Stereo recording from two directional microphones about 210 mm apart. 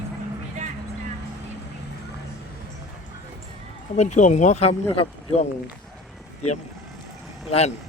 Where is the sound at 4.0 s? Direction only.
35° left (ahead or behind).